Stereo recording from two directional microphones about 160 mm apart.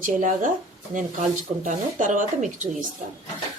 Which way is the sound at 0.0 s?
55° right (ahead or behind).